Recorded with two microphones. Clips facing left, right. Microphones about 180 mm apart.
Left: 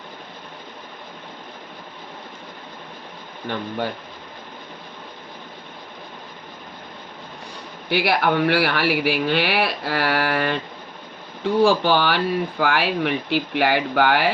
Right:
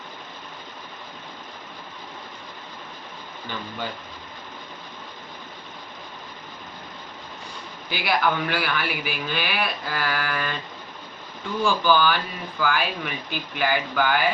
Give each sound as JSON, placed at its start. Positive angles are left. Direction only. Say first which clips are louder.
{"t": 3.4, "sound": "speech", "louder": "left 7 dB", "side_deg": 65}
{"t": 7.9, "sound": "speech", "louder": "left 4 dB", "side_deg": 65}